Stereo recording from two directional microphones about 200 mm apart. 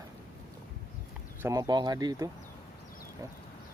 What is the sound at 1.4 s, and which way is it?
Speech, 20° right (ahead or behind).